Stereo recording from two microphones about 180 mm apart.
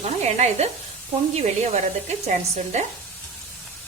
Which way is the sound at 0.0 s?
35° right (ahead or behind).